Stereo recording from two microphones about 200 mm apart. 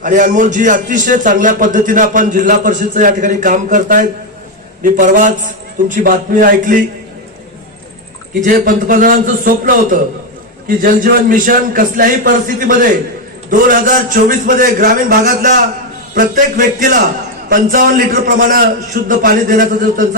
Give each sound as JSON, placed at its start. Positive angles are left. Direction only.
{"t": 0.0, "sound": "a man's voice", "side_deg": -40}
{"t": 8.4, "sound": "a man's voice", "side_deg": -45}